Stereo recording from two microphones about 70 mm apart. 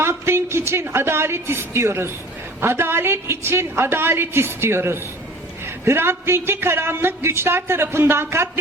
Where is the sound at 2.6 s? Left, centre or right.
Right.